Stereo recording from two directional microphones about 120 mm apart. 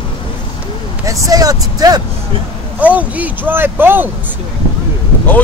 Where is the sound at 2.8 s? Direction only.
15° right (ahead or behind).